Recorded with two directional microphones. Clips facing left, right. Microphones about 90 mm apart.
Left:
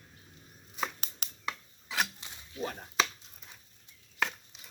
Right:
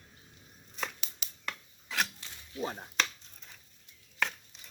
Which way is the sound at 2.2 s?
20° left (ahead or behind).